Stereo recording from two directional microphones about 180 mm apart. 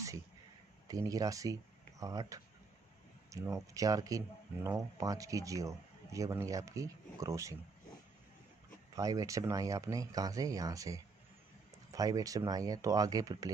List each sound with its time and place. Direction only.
0.8 s a man's voice: 20° right (ahead or behind)
8.9 s speech: 20° right (ahead or behind)